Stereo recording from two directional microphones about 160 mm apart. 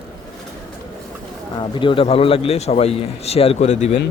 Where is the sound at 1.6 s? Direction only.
30° left (ahead or behind).